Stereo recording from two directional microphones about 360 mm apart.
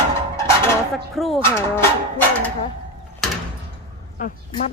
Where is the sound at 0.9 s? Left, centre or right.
Centre.